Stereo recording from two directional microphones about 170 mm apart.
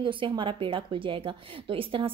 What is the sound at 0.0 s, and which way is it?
A woman's voice, 30° right (ahead or behind).